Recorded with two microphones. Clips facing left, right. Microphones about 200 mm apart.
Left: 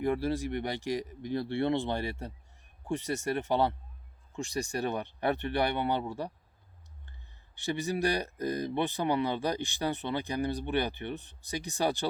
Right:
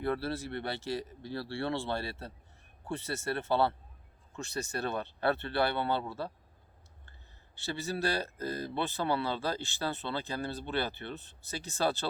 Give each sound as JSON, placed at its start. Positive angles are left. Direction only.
{"t": 0.0, "sound": "speech", "side_deg": 15}
{"t": 7.5, "sound": "speech", "side_deg": 15}